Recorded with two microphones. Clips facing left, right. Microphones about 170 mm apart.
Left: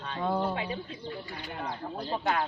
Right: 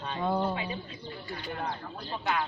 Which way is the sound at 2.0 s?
40° left (ahead or behind).